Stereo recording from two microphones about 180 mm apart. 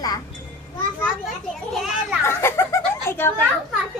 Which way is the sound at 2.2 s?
15° left (ahead or behind).